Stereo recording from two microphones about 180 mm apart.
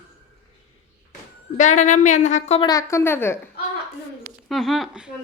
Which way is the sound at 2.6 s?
20° left (ahead or behind).